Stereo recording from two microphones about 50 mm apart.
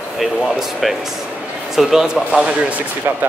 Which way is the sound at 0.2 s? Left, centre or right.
Centre.